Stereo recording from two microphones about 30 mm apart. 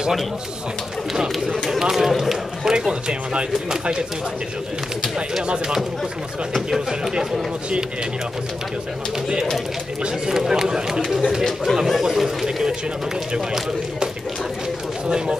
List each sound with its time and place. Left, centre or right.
1.8 s speech: centre
2.7 s speech: right
6.7 s speech: centre
10.5 s speech: centre
15.0 s speech: right